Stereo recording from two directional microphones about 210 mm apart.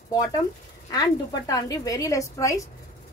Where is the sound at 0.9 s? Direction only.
15° left (ahead or behind).